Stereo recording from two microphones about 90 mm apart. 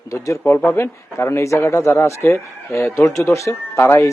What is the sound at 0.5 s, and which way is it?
A man's voice, 25° left (ahead or behind).